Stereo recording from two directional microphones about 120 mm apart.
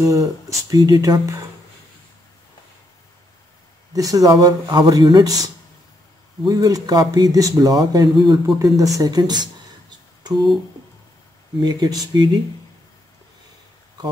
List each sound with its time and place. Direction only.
0.0 s speech: 25° right (ahead or behind)
3.9 s speech: 30° right (ahead or behind)
11.6 s speech: 35° right (ahead or behind)